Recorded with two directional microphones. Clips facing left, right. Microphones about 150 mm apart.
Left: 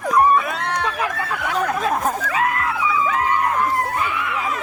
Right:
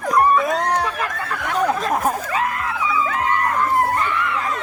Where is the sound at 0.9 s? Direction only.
10° left (ahead or behind).